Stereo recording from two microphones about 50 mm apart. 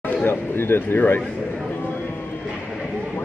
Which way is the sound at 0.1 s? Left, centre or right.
Left.